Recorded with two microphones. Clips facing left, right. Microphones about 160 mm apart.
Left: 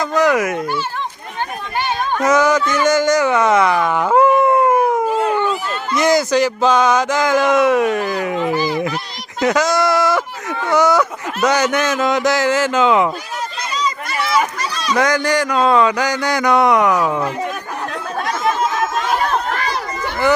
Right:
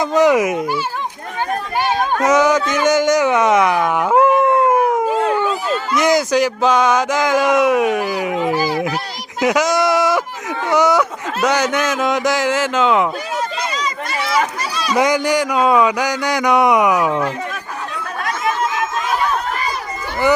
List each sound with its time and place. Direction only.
0.0 s a child's voice: 20° right (ahead or behind)
1.8 s a sound: 15° right (ahead or behind)
2.8 s speech: 15° right (ahead or behind)
5.1 s a sound: centre (ahead or behind)
11.4 s speech: centre (ahead or behind)
14.9 s a sound: 20° right (ahead or behind)
17.1 s speech: 10° left (ahead or behind)
18.3 s chatter: 35° left (ahead or behind)
19.5 s chatter: 80° left